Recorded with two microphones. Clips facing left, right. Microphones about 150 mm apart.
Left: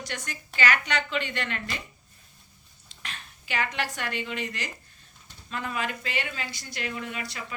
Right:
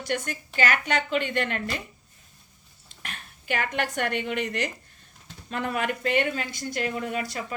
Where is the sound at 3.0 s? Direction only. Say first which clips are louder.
Right 6 dB; 50° right (ahead or behind).